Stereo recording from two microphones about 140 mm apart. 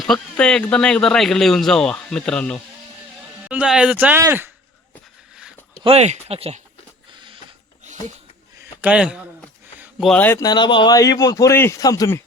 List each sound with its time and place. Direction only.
0.0 s speech: 5° left (ahead or behind)
3.4 s speech: 10° right (ahead or behind)
5.8 s speech: 50° right (ahead or behind)
7.1 s printer: 35° right (ahead or behind)
8.8 s speech: 10° right (ahead or behind)
10.0 s speech: 10° left (ahead or behind)
10.3 s speech: 30° left (ahead or behind)